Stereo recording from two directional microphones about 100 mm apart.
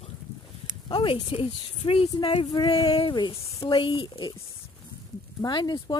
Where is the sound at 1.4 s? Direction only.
80° left.